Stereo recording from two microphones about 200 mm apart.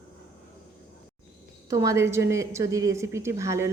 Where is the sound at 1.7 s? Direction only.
15° right (ahead or behind).